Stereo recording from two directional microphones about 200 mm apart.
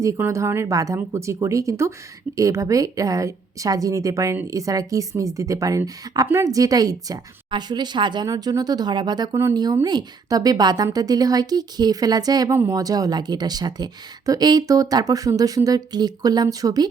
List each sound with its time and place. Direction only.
0.0 s a woman's voice: 15° right (ahead or behind)